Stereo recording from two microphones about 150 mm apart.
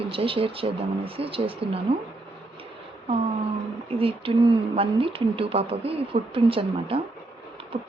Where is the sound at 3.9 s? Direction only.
40° right (ahead or behind).